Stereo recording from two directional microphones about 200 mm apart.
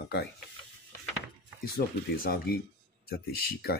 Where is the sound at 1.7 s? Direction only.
50° left (ahead or behind).